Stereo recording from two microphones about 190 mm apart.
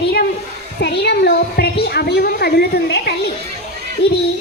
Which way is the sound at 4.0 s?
30° left (ahead or behind).